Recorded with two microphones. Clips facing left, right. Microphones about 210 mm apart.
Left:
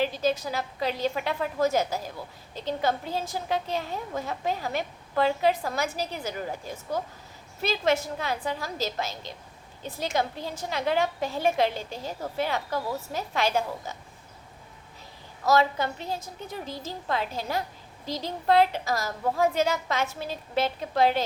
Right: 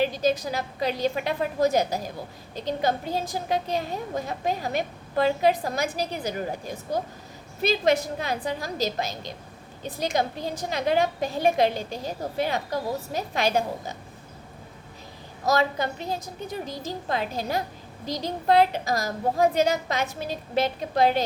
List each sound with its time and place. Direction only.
0.0 s a woman's voice: 15° right (ahead or behind)
15.4 s a woman's voice: 15° right (ahead or behind)